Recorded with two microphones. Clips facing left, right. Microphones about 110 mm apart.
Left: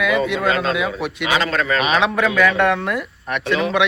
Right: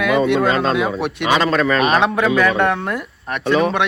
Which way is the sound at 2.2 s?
30° right (ahead or behind).